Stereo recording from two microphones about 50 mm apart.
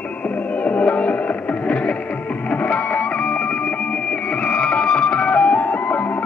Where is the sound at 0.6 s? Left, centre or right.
Left.